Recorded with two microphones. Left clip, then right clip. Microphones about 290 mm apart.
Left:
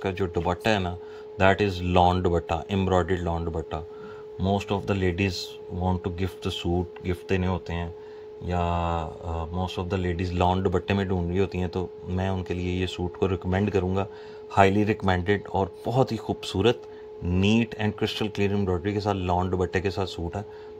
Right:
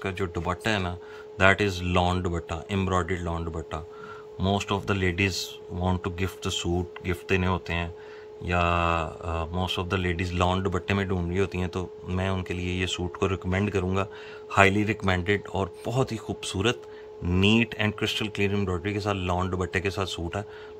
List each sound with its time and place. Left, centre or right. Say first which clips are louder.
0.0 s speech: left 3 dB; centre
8.5 s mantra: right 3 dB; centre
9.7 s speech: right 2 dB; centre